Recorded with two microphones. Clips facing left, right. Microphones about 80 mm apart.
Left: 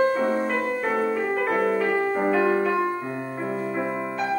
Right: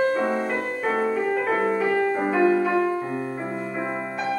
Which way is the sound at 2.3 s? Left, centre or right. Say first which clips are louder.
Right 3 dB; centre.